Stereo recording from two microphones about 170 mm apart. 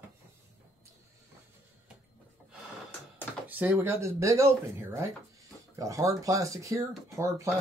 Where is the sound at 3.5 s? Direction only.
10° right (ahead or behind).